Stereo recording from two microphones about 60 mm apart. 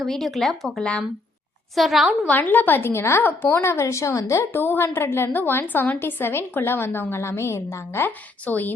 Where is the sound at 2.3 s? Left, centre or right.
Left.